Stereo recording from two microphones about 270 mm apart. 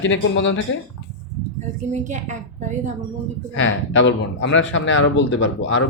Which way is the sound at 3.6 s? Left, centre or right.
Left.